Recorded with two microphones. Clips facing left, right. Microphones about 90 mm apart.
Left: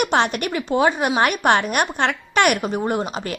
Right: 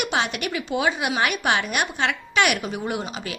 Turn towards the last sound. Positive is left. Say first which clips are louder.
# left 5 dB
turn(degrees=45)  # may be behind; listen again after turning